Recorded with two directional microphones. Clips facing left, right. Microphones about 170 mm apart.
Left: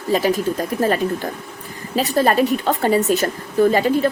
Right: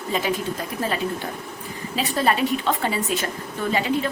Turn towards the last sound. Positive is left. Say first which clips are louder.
# left 8 dB
turn(degrees=40)  # may be behind; listen again after turning